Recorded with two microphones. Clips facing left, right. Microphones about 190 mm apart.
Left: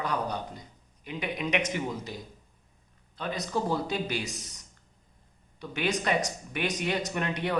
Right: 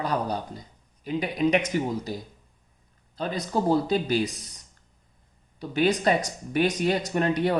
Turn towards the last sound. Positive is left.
turn(degrees=-35)  # may be behind; listen again after turning